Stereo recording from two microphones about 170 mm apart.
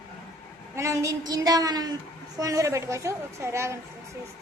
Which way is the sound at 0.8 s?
15° right (ahead or behind).